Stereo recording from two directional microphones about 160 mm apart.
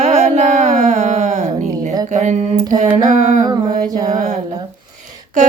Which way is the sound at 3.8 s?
25° right (ahead or behind).